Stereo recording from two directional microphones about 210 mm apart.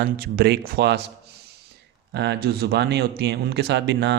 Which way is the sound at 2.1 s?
55° right (ahead or behind).